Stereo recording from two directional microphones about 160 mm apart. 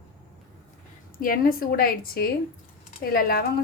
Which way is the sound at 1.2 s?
65° left (ahead or behind).